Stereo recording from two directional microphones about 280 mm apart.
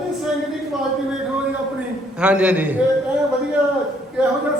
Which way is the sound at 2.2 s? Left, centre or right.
Centre.